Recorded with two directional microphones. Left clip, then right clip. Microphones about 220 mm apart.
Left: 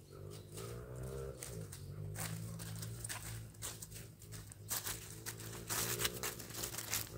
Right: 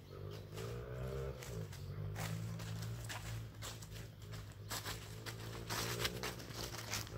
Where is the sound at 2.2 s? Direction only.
15° left (ahead or behind).